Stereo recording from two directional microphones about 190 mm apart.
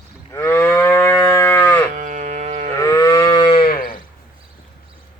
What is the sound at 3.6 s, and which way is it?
Sheep, 45° left (ahead or behind).